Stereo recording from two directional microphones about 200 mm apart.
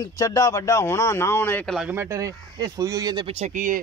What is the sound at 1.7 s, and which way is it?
Speech, 10° right (ahead or behind).